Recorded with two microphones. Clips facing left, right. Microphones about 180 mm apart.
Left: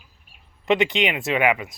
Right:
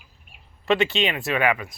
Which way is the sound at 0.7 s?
20° left (ahead or behind).